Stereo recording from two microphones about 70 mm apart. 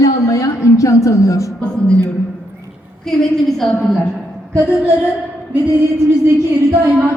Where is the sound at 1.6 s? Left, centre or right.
Centre.